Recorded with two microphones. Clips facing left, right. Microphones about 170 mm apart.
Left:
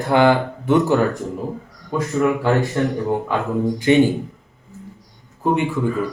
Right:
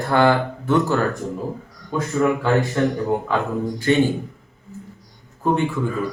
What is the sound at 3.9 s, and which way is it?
Speech, 15° left (ahead or behind).